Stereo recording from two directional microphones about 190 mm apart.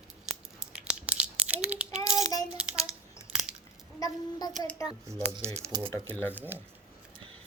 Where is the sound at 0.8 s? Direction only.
5° right (ahead or behind).